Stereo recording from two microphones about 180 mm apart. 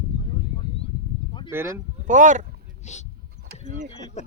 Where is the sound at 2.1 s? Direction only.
45° right (ahead or behind).